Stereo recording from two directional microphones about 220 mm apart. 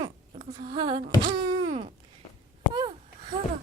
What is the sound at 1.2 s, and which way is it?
Wail, 20° right (ahead or behind).